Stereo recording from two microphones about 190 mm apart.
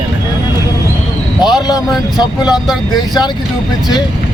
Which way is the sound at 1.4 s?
20° left (ahead or behind).